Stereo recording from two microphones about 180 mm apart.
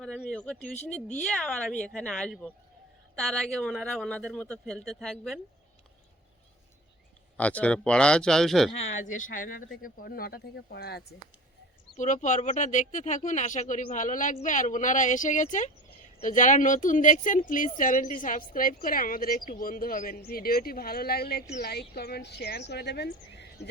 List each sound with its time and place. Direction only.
0.0 s speech: centre (ahead or behind)
0.6 s speech: 40° left (ahead or behind)
1.2 s speech: 5° left (ahead or behind)
7.3 s speech: 10° left (ahead or behind)
8.8 s speech: 90° left
9.0 s speech: 45° left (ahead or behind); by 11.0 s 65° left (ahead or behind)
11.9 s speech: 45° left (ahead or behind); by 23.6 s 70° left (ahead or behind)